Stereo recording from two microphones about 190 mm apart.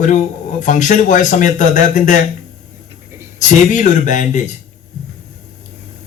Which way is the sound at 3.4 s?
40° left (ahead or behind).